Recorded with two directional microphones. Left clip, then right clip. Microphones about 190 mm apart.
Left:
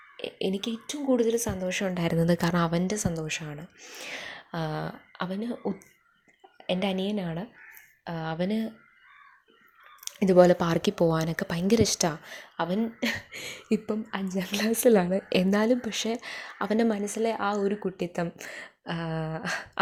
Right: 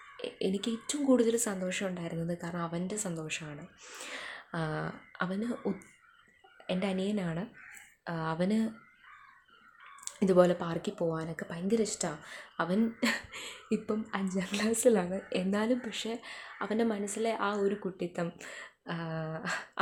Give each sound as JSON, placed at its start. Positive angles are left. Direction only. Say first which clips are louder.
{"t": 0.2, "sound": "speech", "louder": "left 3 dB", "side_deg": 15}
{"t": 1.9, "sound": "speech", "louder": "left 11 dB", "side_deg": 40}
{"t": 3.8, "sound": "speech", "louder": "left 4 dB", "side_deg": 15}
{"t": 10.0, "sound": "speech", "louder": "left 6 dB", "side_deg": 15}
{"t": 10.6, "sound": "speech", "louder": "left 9 dB", "side_deg": 35}
{"t": 12.2, "sound": "speech", "louder": "left 3 dB", "side_deg": 20}
{"t": 13.3, "sound": "cough", "louder": "left 5 dB", "side_deg": 25}
{"t": 13.8, "sound": "a woman's voice", "louder": "left 2 dB", "side_deg": 15}